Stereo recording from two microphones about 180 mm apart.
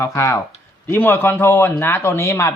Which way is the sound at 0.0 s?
15° left (ahead or behind).